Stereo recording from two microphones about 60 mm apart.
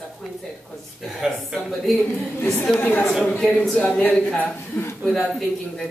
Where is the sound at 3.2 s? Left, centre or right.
Centre.